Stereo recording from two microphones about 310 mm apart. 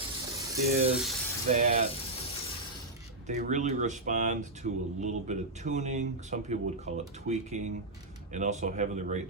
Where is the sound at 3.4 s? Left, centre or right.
Right.